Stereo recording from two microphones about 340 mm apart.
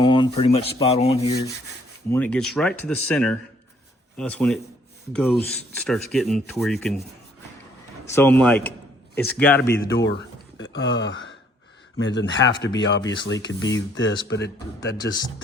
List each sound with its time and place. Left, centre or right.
0.0 s rub: centre
2.0 s speech: centre
8.1 s speech: centre
9.4 s rub: centre
9.9 s speech: left